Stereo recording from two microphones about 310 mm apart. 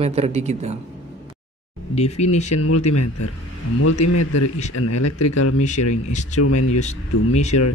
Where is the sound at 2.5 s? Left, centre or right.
Left.